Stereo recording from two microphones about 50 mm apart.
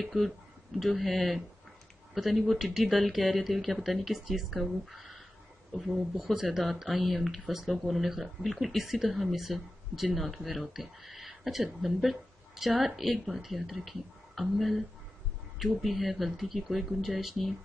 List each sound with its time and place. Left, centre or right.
0.0 s speech: centre